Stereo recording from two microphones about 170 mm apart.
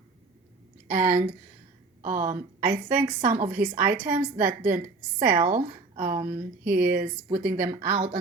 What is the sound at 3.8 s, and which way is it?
Speech, 10° right (ahead or behind).